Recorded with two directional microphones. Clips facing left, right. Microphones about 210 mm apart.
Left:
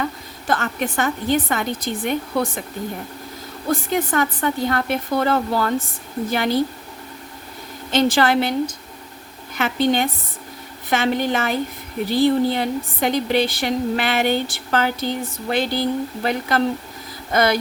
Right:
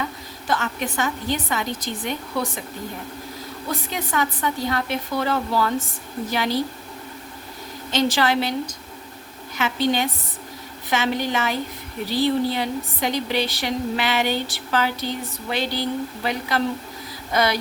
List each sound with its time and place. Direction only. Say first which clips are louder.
0.0 s a woman's voice: left 4 dB; 50° left (ahead or behind)
3.7 s a woman's voice: left 7 dB; 50° left (ahead or behind)
7.9 s a woman's voice: left 4 dB; 50° left (ahead or behind)